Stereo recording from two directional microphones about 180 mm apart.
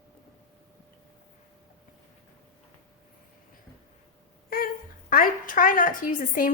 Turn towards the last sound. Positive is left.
turn(degrees=45)  # may be behind; listen again after turning